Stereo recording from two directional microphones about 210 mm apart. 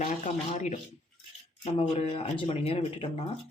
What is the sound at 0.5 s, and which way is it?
Speech, 35° left (ahead or behind).